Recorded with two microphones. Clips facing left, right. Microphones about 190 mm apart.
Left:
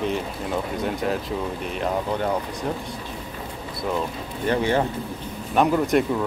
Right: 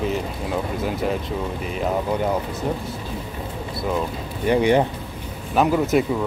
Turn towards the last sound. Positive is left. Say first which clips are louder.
# right 1 dB
turn(degrees=-5)  # may be behind; listen again after turning